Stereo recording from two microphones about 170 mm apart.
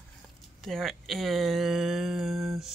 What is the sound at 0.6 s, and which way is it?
Speech, centre (ahead or behind).